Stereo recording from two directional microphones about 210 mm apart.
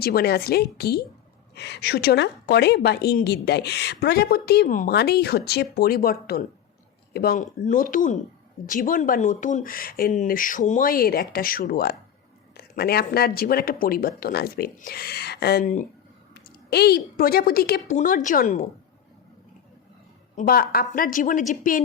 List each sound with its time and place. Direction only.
0.0 s a woman's voice: 50° left (ahead or behind)
16.3 s a woman's voice: 50° left (ahead or behind)
20.3 s speech: 45° left (ahead or behind)